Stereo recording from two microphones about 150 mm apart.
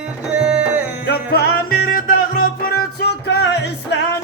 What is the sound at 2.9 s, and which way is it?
Music, 90° left.